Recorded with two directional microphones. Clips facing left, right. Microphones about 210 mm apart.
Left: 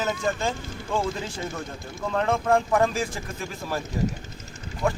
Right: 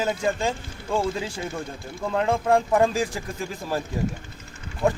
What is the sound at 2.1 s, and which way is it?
Speech, 15° right (ahead or behind).